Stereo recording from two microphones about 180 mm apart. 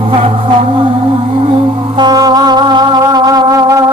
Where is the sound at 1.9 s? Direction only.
20° right (ahead or behind).